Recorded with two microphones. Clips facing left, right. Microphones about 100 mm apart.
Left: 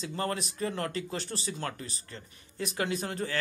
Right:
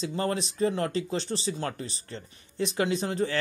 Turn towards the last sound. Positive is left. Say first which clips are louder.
# right 5 dB
turn(degrees=-20)  # may be behind; listen again after turning